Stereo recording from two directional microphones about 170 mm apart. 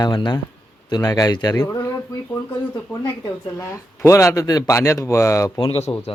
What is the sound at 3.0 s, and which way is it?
Speech, 15° left (ahead or behind).